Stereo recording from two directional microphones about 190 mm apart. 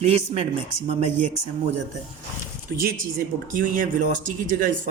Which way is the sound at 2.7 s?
50° right (ahead or behind).